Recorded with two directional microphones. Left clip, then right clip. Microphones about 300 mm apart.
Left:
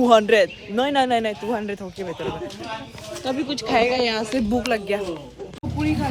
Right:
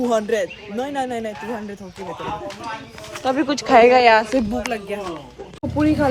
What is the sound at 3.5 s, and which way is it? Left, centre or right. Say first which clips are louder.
Speech: right 8 dB; centre.